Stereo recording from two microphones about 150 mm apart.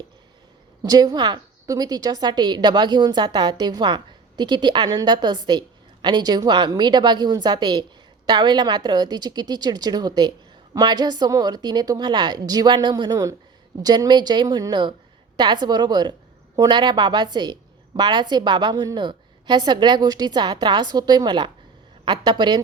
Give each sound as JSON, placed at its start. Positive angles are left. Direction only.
{"t": 0.8, "sound": "a woman's voice", "side_deg": -25}